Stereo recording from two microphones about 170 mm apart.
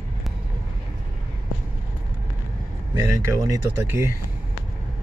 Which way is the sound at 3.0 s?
20° right (ahead or behind).